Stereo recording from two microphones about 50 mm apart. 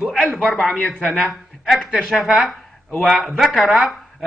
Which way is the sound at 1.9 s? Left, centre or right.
Centre.